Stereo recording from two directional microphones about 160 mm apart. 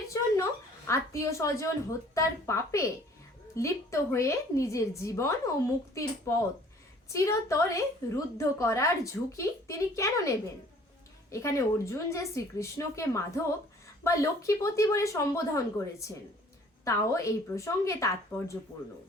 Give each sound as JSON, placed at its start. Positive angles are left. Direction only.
{"t": 0.9, "sound": "a woman's voice", "side_deg": 20}